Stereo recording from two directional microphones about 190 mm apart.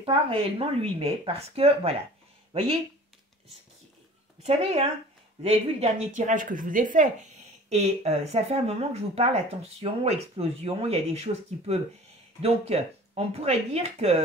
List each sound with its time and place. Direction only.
0.0 s speech: 25° right (ahead or behind)
4.4 s speech: 35° right (ahead or behind)